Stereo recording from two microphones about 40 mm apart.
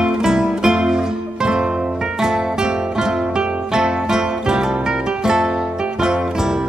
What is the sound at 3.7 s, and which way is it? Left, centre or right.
Music, centre.